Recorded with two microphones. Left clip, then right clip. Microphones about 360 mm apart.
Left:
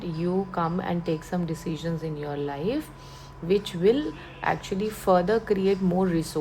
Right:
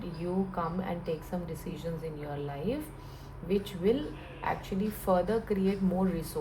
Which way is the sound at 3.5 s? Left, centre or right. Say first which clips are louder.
Left 7 dB; left.